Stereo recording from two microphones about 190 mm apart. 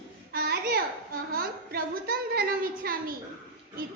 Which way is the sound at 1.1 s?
50° right (ahead or behind).